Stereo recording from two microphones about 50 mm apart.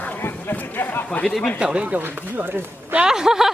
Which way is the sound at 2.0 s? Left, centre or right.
Right.